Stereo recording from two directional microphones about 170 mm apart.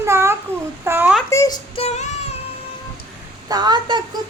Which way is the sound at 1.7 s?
35° left (ahead or behind).